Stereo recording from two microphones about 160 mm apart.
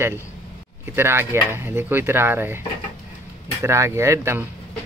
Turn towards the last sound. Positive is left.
turn(degrees=-15)  # may be behind; listen again after turning